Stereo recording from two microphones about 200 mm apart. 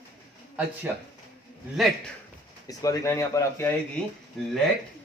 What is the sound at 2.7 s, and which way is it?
Speech, 15° left (ahead or behind).